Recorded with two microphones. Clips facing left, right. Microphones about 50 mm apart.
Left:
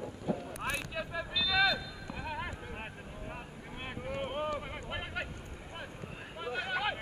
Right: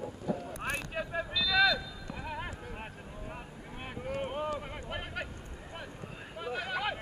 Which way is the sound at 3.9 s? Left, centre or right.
Centre.